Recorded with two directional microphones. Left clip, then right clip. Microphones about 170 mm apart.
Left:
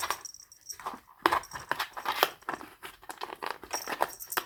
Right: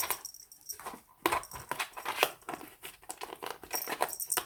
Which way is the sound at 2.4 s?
10° right (ahead or behind).